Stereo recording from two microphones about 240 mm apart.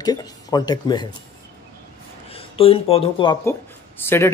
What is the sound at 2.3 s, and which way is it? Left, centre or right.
Speech, left.